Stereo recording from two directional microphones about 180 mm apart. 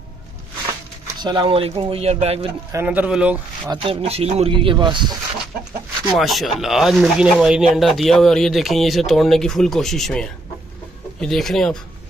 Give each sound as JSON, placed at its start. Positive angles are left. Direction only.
{"t": 1.0, "sound": "speech", "side_deg": -25}
{"t": 2.7, "sound": "speech", "side_deg": -10}
{"t": 3.7, "sound": "speech", "side_deg": -30}
{"t": 6.1, "sound": "speech", "side_deg": 0}